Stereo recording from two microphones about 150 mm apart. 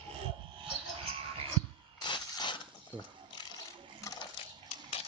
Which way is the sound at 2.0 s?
30° left (ahead or behind).